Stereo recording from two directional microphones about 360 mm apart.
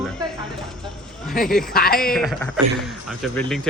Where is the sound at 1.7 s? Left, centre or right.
Left.